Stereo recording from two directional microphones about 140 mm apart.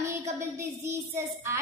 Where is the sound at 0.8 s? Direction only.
15° right (ahead or behind).